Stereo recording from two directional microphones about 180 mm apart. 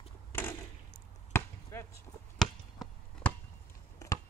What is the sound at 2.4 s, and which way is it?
Chop, centre (ahead or behind).